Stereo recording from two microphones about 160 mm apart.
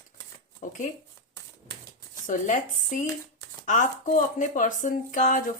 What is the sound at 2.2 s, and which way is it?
Speech, 55° left (ahead or behind).